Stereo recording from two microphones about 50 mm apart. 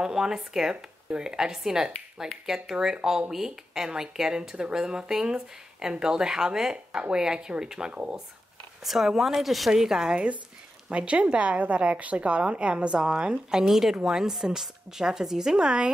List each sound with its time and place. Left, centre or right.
0.0 s speech: centre
7.9 s a woman's voice: right
8.8 s a woman's voice: centre